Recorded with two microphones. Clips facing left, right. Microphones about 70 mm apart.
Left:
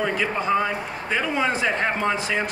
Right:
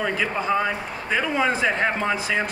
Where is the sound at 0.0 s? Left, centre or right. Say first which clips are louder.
Left 1 dB; centre.